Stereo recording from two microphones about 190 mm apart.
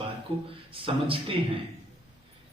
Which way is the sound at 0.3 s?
30° right (ahead or behind).